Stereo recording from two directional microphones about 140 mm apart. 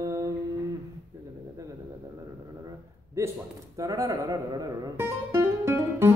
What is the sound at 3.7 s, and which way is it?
Speech, 25° right (ahead or behind).